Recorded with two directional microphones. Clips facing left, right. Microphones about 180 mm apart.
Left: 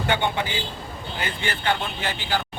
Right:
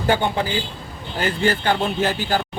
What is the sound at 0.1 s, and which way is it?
Speech, 35° right (ahead or behind).